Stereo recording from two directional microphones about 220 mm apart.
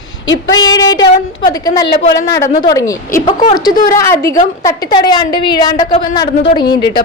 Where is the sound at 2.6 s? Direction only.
15° left (ahead or behind).